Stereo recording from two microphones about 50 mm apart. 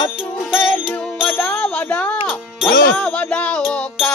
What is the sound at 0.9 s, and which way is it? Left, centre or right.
Music, centre.